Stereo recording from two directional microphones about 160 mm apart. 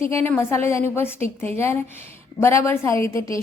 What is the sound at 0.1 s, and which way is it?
A woman's voice, 15° left (ahead or behind).